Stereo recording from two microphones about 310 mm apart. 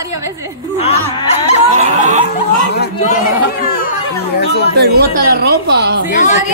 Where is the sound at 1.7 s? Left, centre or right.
Right.